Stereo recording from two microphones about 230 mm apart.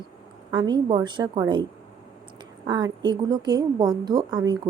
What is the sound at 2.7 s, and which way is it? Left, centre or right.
A woman's voice, centre.